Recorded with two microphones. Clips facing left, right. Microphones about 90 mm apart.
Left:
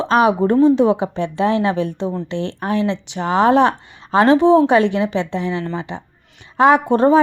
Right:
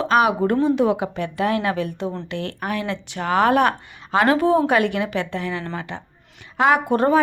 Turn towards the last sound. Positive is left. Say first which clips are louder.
# left 4 dB
turn(degrees=25)  # may be behind; listen again after turning